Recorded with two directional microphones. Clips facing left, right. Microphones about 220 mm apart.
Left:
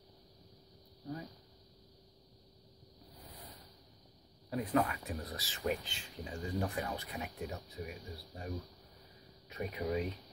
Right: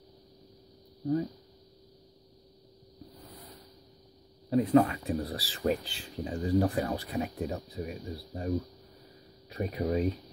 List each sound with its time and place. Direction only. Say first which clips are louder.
4.5 s speech: right 10 dB; 25° right (ahead or behind)